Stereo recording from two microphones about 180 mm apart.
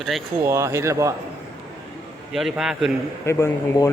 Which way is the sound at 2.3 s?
Centre (ahead or behind).